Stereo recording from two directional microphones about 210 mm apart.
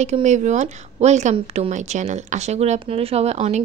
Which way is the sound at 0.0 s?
35° right (ahead or behind).